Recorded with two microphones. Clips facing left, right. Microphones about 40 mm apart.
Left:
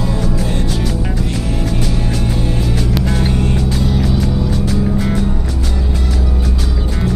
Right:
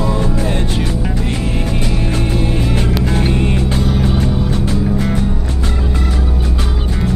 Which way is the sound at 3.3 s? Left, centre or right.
Right.